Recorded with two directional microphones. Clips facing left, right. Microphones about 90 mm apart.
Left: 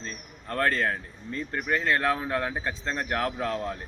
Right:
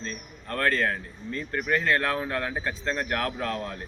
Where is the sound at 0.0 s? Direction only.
25° left (ahead or behind).